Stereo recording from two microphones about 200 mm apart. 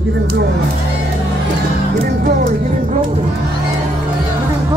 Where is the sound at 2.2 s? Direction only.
45° right (ahead or behind).